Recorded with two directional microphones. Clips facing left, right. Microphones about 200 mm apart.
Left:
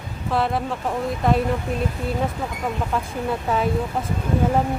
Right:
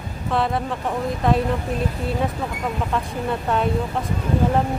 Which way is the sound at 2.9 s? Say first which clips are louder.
Even; centre (ahead or behind).